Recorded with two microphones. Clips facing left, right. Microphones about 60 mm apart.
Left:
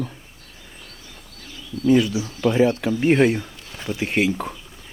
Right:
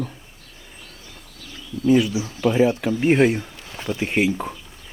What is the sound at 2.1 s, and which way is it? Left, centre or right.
Speech, centre.